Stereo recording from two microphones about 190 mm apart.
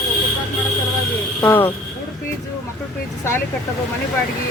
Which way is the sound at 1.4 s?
10° left (ahead or behind).